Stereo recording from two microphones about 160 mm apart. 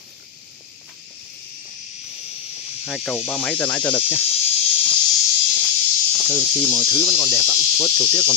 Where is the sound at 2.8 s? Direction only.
Centre (ahead or behind).